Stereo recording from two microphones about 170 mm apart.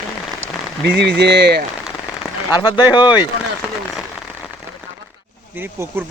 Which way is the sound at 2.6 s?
25° left (ahead or behind).